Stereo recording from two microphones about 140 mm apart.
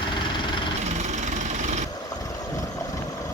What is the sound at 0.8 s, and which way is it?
Vehicle, 55° right (ahead or behind).